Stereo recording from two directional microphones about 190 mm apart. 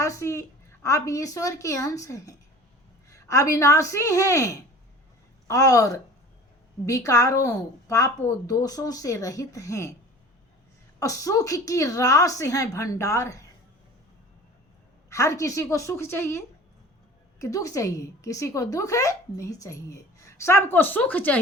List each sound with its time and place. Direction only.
0.0 s a woman's voice: 15° left (ahead or behind)
11.0 s a woman's voice: 15° left (ahead or behind)
15.1 s a woman's voice: 15° left (ahead or behind)
17.4 s a woman's voice: 15° left (ahead or behind)